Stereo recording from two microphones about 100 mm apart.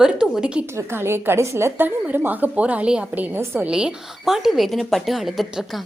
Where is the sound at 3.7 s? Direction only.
10° right (ahead or behind).